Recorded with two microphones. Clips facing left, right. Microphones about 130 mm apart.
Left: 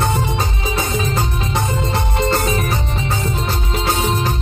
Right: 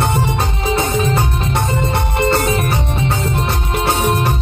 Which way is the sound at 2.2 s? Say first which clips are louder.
Right 3 dB; 60° right (ahead or behind).